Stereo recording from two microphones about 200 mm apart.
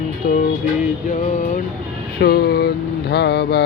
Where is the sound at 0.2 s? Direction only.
45° left (ahead or behind).